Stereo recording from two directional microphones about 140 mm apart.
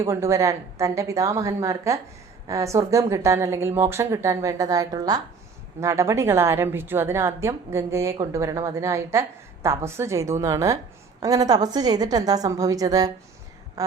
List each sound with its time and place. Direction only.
0.0 s a woman's voice: 20° right (ahead or behind)